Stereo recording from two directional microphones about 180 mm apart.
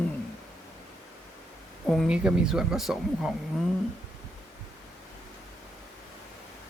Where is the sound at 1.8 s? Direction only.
Centre (ahead or behind).